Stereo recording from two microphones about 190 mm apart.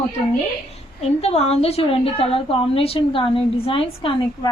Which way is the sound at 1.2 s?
35° left (ahead or behind).